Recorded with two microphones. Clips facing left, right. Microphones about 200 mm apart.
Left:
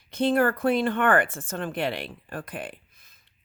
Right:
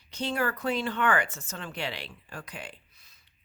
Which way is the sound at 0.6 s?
55° left (ahead or behind).